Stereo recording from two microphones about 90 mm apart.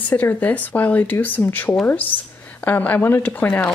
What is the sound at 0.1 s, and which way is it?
Speech, 20° left (ahead or behind).